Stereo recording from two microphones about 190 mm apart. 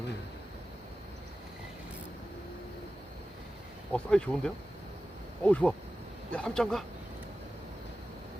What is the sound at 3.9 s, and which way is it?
Speech, 5° left (ahead or behind).